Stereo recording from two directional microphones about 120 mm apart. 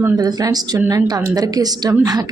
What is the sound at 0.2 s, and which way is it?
A woman's voice, 35° right (ahead or behind).